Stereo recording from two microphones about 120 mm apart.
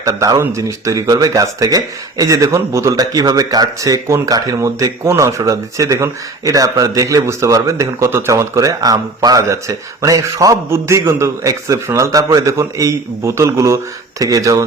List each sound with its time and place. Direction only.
0.0 s speech: 25° right (ahead or behind)